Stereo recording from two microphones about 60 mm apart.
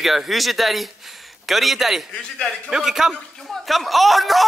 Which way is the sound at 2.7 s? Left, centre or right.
Centre.